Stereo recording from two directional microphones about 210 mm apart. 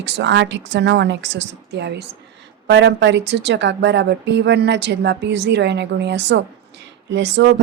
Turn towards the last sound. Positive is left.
turn(degrees=-55)  # may be behind; listen again after turning